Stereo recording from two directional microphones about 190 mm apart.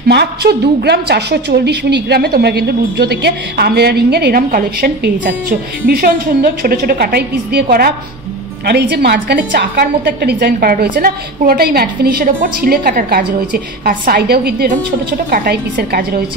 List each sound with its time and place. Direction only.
0.1 s a woman's voice: 60° right (ahead or behind)